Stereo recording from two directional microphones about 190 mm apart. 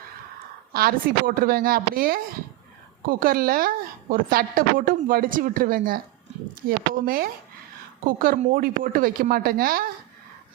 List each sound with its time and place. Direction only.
0.7 s a woman's voice: 50° right (ahead or behind)